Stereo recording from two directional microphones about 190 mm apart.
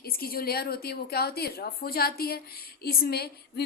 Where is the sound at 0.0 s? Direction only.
55° left (ahead or behind).